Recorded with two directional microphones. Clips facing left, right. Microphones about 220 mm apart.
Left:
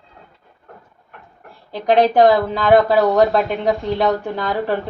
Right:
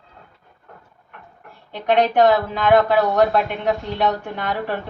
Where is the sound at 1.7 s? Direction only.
35° left (ahead or behind).